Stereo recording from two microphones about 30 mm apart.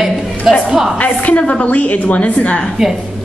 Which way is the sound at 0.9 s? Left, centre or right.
Left.